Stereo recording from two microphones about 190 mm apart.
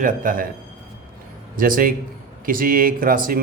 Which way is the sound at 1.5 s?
45° right (ahead or behind).